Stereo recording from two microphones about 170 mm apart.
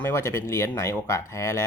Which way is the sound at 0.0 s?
15° left (ahead or behind).